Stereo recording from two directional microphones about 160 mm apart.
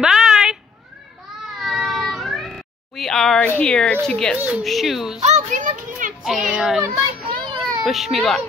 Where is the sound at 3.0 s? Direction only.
Centre (ahead or behind).